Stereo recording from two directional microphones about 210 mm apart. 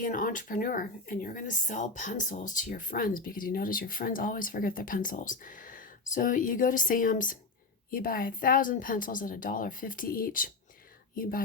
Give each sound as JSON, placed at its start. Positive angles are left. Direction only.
{"t": 0.0, "sound": "speech", "side_deg": 40}